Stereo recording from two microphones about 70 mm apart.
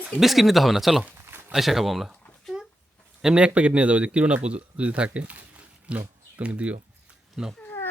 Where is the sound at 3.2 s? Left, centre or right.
Centre.